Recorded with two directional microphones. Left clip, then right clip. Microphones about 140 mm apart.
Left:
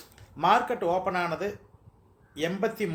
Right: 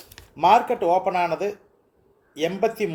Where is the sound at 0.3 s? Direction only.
50° right (ahead or behind).